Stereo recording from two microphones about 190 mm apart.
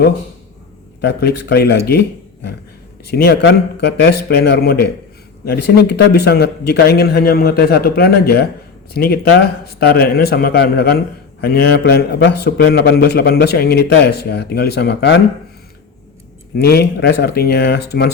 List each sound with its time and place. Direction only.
1.0 s a man's voice: 60° left (ahead or behind)
16.6 s a man's voice: 55° left (ahead or behind)